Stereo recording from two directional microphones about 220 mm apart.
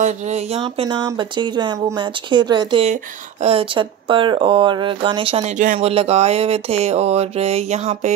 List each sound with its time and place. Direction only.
0.6 s speech: 20° right (ahead or behind)